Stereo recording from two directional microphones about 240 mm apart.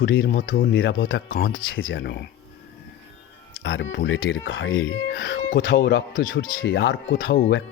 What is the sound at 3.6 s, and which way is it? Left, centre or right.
Speech, left.